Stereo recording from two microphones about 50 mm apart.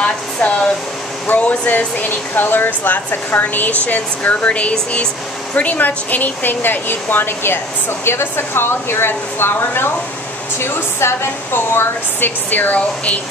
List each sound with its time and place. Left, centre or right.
0.0 s air conditioning: left
1.2 s speech: left
12.4 s speech: left